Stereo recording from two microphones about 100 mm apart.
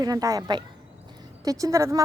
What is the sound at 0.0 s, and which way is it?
Speech, 35° right (ahead or behind).